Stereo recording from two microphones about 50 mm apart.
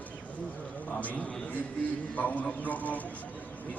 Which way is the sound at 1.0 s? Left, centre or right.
Left.